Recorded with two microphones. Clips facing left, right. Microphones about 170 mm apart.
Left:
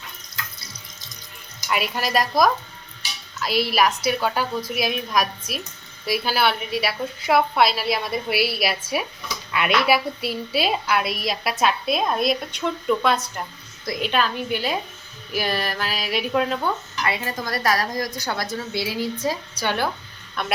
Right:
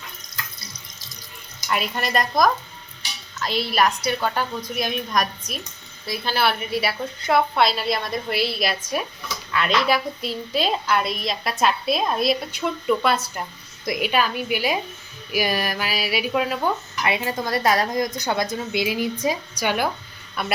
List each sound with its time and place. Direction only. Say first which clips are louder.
1.7 s a woman's voice: left 1 dB; 5° left (ahead or behind)
17.0 s a woman's voice: right 4 dB; 20° right (ahead or behind); by 20.5 s 5° right (ahead or behind)